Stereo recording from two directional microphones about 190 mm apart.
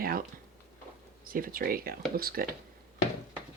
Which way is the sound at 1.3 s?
50° right (ahead or behind).